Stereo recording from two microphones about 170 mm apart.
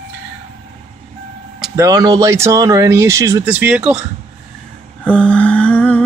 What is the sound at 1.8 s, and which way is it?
Speech, 20° right (ahead or behind).